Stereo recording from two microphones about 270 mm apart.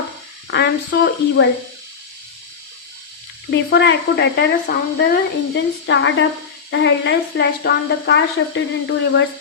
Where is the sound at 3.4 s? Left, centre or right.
Left.